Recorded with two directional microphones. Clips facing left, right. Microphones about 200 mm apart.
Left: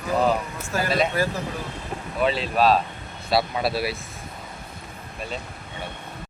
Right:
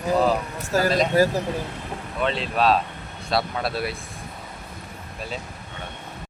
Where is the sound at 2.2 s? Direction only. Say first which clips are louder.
Left 2 dB; 5° left (ahead or behind).